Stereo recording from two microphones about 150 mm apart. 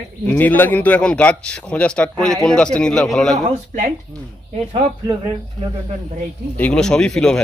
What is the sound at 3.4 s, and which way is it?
Speech, 55° right (ahead or behind).